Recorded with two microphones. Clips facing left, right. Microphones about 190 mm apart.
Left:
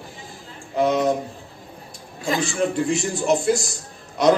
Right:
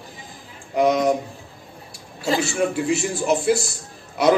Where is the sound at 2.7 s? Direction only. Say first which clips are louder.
Even; 5° right (ahead or behind).